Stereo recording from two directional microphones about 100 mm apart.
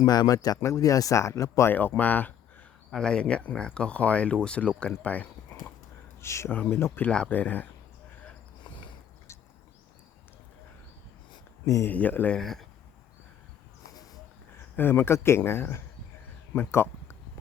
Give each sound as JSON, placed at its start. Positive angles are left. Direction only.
{"t": 0.0, "sound": "speech", "side_deg": 45}
{"t": 2.0, "sound": "speech", "side_deg": 15}
{"t": 6.2, "sound": "speech", "side_deg": 30}
{"t": 6.5, "sound": "speech", "side_deg": 15}
{"t": 11.6, "sound": "speech", "side_deg": 30}
{"t": 11.9, "sound": "speech", "side_deg": 15}
{"t": 12.4, "sound": "speech", "side_deg": 5}
{"t": 14.8, "sound": "speech", "side_deg": 20}